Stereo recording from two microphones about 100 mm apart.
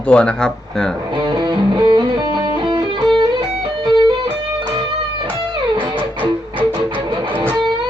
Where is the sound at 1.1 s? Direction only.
45° right (ahead or behind).